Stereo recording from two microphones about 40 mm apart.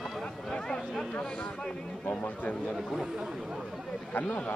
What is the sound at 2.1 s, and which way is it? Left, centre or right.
Speech, left.